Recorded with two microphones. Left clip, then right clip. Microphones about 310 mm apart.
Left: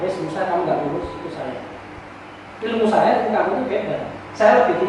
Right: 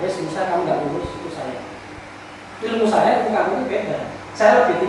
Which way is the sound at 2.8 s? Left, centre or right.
Centre.